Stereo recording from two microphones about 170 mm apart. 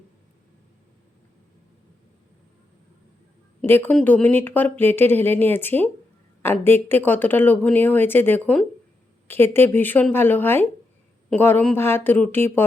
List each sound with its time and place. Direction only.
3.7 s speech: 10° left (ahead or behind)